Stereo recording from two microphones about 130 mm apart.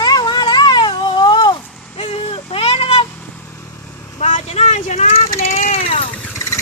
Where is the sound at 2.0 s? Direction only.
45° left (ahead or behind).